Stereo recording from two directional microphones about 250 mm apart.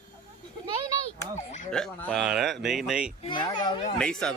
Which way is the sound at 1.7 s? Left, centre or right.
Centre.